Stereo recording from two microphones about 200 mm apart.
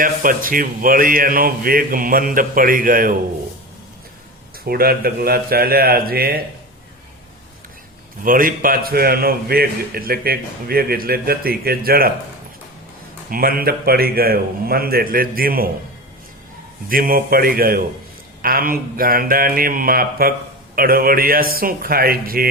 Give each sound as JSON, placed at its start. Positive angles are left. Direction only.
{"t": 0.0, "sound": "a man's voice", "side_deg": -45}
{"t": 4.6, "sound": "a man's voice", "side_deg": -50}
{"t": 8.2, "sound": "a man's voice", "side_deg": -45}
{"t": 13.3, "sound": "a man's voice", "side_deg": -45}
{"t": 16.9, "sound": "a man's voice", "side_deg": -45}